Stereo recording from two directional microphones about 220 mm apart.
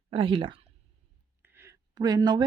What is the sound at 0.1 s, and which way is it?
Speech, 25° right (ahead or behind).